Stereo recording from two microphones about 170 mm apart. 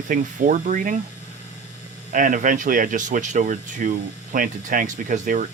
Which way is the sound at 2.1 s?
50° right (ahead or behind).